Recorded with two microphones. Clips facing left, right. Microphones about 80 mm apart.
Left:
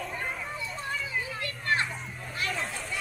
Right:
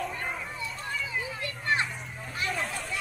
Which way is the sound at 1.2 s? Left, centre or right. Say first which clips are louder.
Right 1 dB; centre.